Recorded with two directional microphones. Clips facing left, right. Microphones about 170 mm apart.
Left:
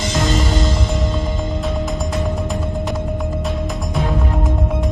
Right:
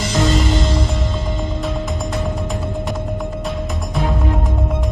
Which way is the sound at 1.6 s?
Centre (ahead or behind).